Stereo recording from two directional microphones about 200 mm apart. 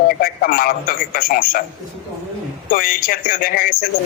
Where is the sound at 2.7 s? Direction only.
45° left (ahead or behind).